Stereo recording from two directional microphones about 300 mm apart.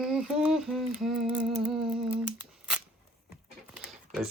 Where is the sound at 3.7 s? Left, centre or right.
Centre.